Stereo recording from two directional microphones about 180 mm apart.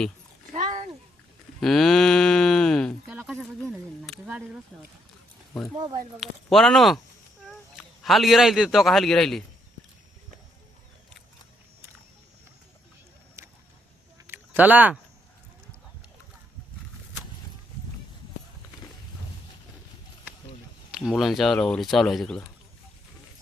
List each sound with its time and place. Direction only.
0.5 s a sound: 40° right (ahead or behind)
1.6 s cattle: centre (ahead or behind)
3.7 s speech: 5° right (ahead or behind)
6.1 s speech: centre (ahead or behind)
13.4 s a sound: 15° right (ahead or behind)
20.9 s speech: centre (ahead or behind)